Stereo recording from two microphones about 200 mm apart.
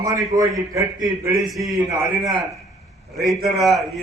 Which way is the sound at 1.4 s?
Centre (ahead or behind).